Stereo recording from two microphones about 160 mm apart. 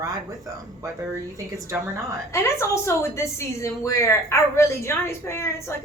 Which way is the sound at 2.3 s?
15° left (ahead or behind).